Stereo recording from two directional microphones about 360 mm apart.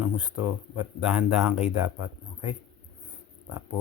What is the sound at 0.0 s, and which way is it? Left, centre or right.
Speech, centre.